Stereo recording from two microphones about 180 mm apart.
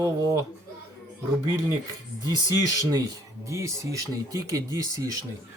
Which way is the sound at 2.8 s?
20° right (ahead or behind).